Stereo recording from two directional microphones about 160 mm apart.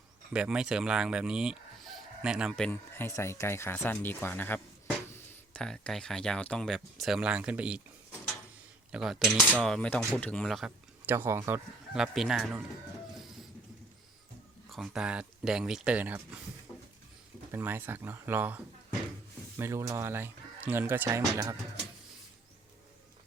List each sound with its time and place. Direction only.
0.3 s speech: 5° right (ahead or behind)
2.6 s speech: 15° left (ahead or behind); by 7.8 s 5° right (ahead or behind)
8.9 s speech: 5° right (ahead or behind)
11.0 s speech: 15° right (ahead or behind)
12.1 s speech: centre (ahead or behind)
14.7 s speech: centre (ahead or behind)
17.5 s speech: 15° right (ahead or behind)